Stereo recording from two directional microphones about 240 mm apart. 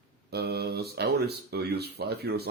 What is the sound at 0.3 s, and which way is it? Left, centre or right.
Speech, right.